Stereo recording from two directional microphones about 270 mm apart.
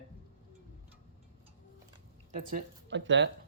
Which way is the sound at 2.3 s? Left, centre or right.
Right.